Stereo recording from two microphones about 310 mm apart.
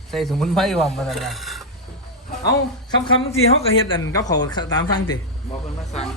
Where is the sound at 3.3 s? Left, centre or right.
Left.